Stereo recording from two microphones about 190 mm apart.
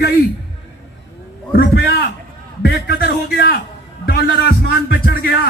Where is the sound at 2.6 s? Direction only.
55° left (ahead or behind).